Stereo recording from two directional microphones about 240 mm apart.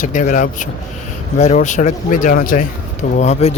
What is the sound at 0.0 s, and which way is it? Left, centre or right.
Speech, left.